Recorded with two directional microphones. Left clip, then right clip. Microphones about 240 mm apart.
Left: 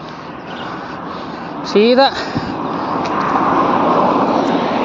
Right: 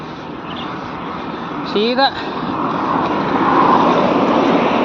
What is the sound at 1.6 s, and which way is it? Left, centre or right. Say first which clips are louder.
Speech: left 4 dB; left.